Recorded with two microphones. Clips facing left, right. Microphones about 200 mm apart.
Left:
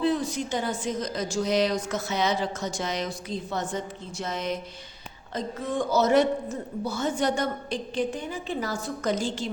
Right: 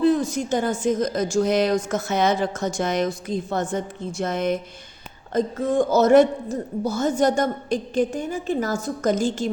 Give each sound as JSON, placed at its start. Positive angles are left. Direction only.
{"t": 0.0, "sound": "a woman's voice", "side_deg": -45}